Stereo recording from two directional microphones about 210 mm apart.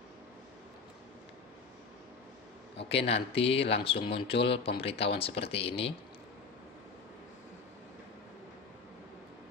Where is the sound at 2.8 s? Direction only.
30° left (ahead or behind).